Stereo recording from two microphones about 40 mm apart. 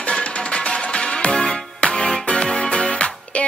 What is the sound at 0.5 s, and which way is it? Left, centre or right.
Music, centre.